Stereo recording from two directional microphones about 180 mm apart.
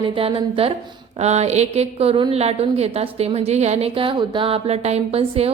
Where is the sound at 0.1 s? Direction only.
30° right (ahead or behind).